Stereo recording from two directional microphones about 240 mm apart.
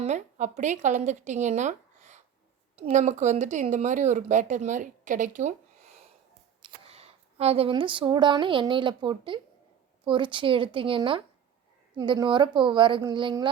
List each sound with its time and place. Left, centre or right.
0.0 s a woman's voice: right